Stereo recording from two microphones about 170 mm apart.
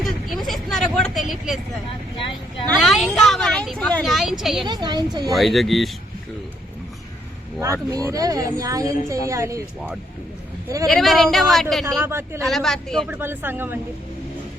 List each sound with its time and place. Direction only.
0.4 s a sound: centre (ahead or behind)
2.1 s speech: 30° left (ahead or behind)
2.6 s speech: 5° left (ahead or behind)
4.6 s speech: 25° right (ahead or behind)
5.3 s speech: centre (ahead or behind)
7.6 s speech: 20° right (ahead or behind)
10.8 s speech: centre (ahead or behind)
11.9 s speech: 15° right (ahead or behind)
12.4 s speech: centre (ahead or behind)
13.1 s speech: 10° right (ahead or behind)